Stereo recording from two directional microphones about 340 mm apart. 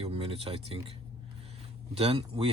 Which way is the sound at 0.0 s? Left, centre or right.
Centre.